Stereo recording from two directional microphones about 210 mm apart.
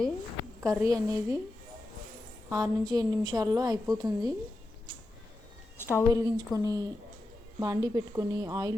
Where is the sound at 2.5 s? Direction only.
15° right (ahead or behind).